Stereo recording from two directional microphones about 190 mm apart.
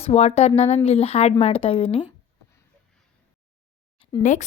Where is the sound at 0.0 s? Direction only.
35° left (ahead or behind).